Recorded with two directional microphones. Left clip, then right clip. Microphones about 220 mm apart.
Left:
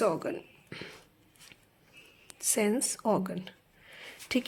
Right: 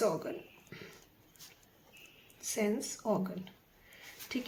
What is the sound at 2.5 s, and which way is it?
A woman's voice, 45° left (ahead or behind).